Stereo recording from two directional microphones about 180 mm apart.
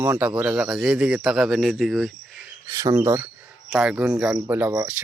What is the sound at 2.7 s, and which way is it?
Cricket, 20° right (ahead or behind).